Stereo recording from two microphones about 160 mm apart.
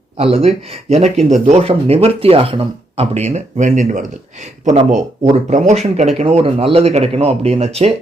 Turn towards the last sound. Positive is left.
turn(degrees=-40)  # may be behind; listen again after turning